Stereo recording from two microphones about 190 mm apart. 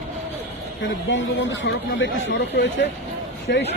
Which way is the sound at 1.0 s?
80° left.